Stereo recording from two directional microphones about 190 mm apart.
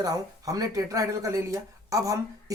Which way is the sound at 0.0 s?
20° right (ahead or behind).